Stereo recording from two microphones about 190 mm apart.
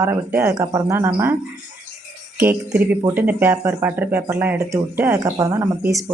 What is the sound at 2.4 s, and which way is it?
Speech, 10° right (ahead or behind).